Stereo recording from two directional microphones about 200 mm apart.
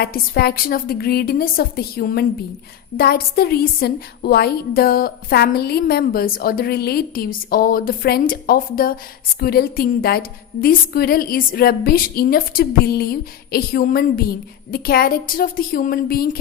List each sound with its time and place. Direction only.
0.0 s a woman's voice: 50° left (ahead or behind)